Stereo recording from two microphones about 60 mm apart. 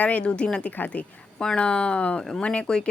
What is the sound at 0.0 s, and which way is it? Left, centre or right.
Speech, left.